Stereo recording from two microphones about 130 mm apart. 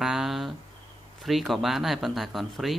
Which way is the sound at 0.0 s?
Centre (ahead or behind).